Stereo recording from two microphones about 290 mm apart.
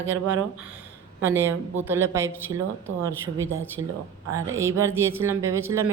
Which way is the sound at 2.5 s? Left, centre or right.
Right.